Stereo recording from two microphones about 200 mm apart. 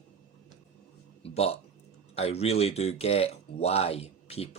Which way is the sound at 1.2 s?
30° left (ahead or behind).